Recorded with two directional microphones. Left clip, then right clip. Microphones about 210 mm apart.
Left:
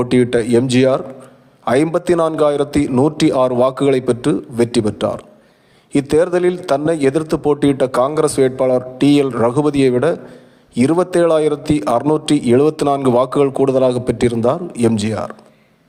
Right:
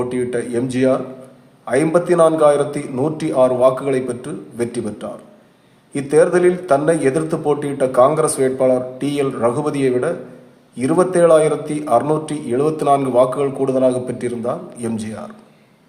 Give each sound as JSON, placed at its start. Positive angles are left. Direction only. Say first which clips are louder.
{"t": 0.0, "sound": "a man's voice", "louder": "left 6 dB", "side_deg": 45}